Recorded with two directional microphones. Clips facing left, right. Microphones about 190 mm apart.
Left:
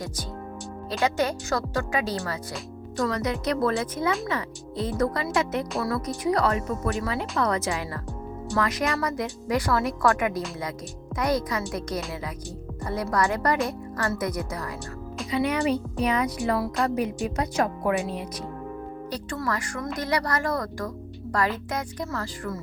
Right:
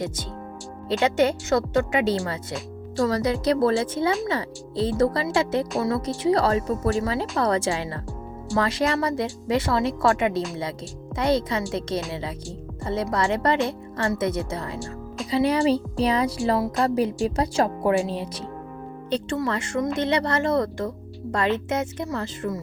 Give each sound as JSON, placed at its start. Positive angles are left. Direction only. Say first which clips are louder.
{"t": 0.9, "sound": "speech", "louder": "right 5 dB", "side_deg": -25}
{"t": 12.8, "sound": "speech", "louder": "right 1 dB", "side_deg": -25}